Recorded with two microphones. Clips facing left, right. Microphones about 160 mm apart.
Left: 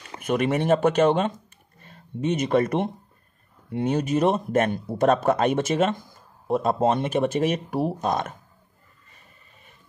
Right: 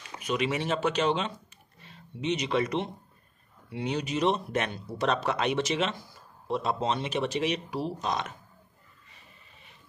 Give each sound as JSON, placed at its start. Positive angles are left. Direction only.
{"t": 0.2, "sound": "speech", "side_deg": 50}